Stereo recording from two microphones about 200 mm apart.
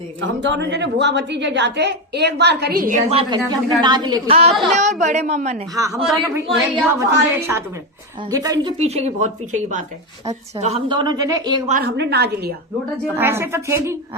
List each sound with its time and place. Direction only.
0.2 s a woman's voice: 60° right (ahead or behind); by 3.0 s 45° right (ahead or behind)
3.1 s a woman's voice: 25° right (ahead or behind)
5.7 s a woman's voice: 15° right (ahead or behind)
8.8 s a woman's voice: 35° right (ahead or behind)
11.7 s a woman's voice: 55° right (ahead or behind)
13.1 s a woman's voice: 10° right (ahead or behind)